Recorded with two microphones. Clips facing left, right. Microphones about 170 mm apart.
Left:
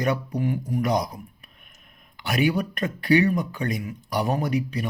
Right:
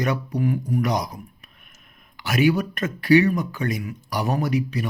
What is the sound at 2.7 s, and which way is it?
A man's voice, 35° left (ahead or behind).